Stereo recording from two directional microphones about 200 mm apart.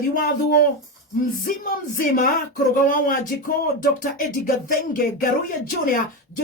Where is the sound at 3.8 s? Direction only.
40° left (ahead or behind).